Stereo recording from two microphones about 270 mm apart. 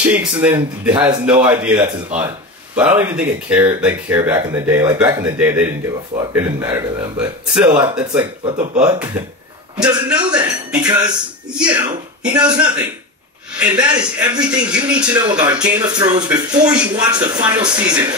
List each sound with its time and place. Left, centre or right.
0.0 s speech: centre
8.2 s speech: centre
8.7 s speech: centre
12.3 s speech: centre
13.6 s speech: centre
17.4 s speech: centre
17.6 s speech: centre